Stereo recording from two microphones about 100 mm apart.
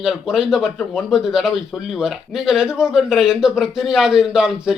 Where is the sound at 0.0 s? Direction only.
5° right (ahead or behind).